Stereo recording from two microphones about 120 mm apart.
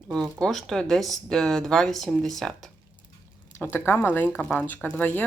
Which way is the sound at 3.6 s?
20° left (ahead or behind).